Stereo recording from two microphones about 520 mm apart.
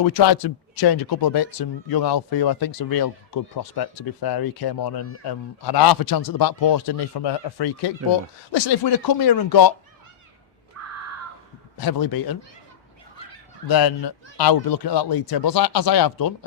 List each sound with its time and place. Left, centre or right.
0.0 s speech: left
10.8 s a sound: right
11.8 s speech: left
13.7 s speech: left